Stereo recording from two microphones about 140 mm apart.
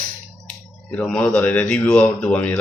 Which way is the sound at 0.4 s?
10° left (ahead or behind).